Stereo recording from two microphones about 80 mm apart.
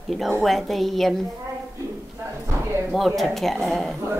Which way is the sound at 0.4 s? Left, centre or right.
Centre.